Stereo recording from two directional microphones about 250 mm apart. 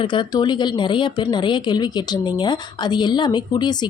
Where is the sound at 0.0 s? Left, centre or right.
Centre.